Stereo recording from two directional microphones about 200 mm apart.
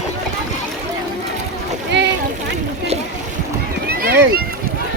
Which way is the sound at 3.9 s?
50° right (ahead or behind).